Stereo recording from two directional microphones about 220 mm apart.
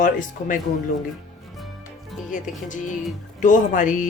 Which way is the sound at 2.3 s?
35° left (ahead or behind).